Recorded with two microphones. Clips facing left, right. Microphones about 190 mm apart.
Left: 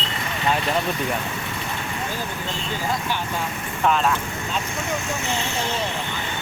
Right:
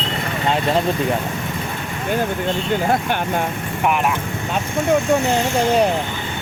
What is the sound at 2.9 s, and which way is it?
Speech, 55° right (ahead or behind).